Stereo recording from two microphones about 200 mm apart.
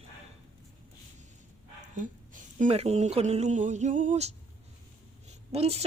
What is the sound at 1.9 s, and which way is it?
Speech, 40° right (ahead or behind).